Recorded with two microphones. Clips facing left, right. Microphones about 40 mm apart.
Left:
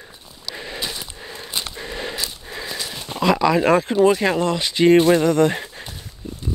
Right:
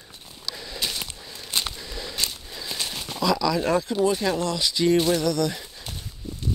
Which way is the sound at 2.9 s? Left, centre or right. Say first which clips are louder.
Left 2 dB; left.